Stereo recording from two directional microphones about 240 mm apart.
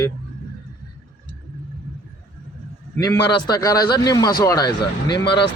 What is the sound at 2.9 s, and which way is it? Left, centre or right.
A man's voice, centre.